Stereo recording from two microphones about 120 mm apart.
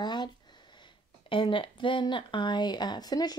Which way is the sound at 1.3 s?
45° left (ahead or behind).